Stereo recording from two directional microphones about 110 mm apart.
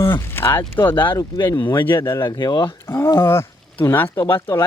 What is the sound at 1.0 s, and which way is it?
Speech, 40° left (ahead or behind).